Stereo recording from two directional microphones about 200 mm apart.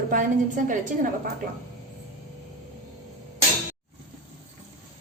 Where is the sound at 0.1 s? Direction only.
40° right (ahead or behind).